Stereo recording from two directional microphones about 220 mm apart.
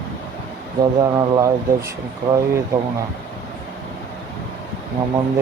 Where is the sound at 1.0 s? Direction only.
15° right (ahead or behind).